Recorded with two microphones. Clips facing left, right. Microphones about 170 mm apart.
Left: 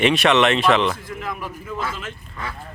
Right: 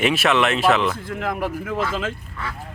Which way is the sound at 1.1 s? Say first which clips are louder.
Right 5 dB; 55° right (ahead or behind).